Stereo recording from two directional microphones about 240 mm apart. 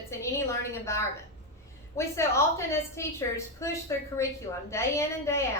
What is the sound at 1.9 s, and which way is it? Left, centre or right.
A woman's voice, centre.